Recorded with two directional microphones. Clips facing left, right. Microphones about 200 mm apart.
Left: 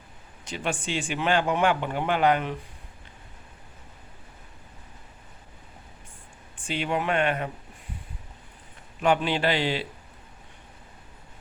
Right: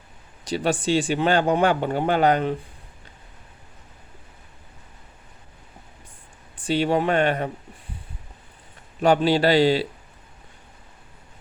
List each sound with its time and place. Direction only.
0.4 s speech: 35° right (ahead or behind)
6.7 s speech: 35° right (ahead or behind)
9.0 s speech: 35° right (ahead or behind)